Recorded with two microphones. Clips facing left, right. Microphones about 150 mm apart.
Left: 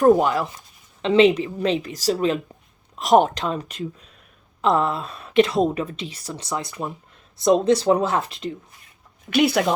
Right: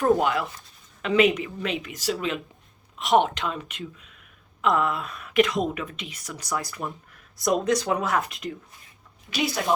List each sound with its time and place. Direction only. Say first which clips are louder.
0.0 s a woman's voice: left 5 dB; 40° left (ahead or behind)
9.3 s speech: left 7 dB; 70° left (ahead or behind)